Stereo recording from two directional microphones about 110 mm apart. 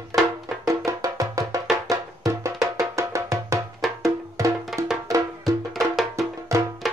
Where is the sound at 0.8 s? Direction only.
30° right (ahead or behind).